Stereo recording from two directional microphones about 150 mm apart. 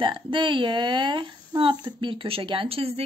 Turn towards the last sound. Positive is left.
turn(degrees=-40)  # may be behind; listen again after turning